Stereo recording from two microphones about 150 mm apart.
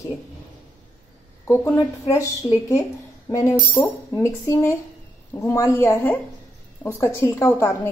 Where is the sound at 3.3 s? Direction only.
20° left (ahead or behind).